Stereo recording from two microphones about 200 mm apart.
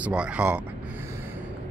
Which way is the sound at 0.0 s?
5° right (ahead or behind).